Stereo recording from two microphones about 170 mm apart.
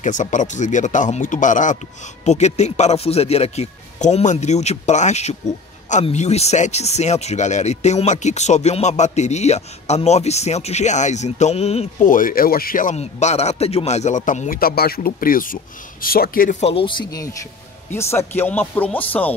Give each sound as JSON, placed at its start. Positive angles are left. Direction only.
{"t": 0.0, "sound": "speech", "side_deg": 45}
{"t": 14.6, "sound": "speech", "side_deg": 60}